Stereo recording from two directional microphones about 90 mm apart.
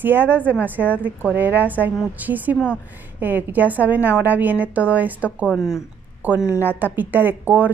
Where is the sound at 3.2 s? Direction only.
20° right (ahead or behind).